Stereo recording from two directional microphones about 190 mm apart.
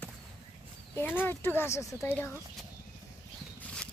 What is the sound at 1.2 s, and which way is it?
Speech, 10° left (ahead or behind).